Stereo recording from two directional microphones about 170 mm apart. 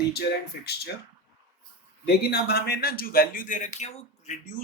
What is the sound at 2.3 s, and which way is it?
A man's voice, 70° left (ahead or behind).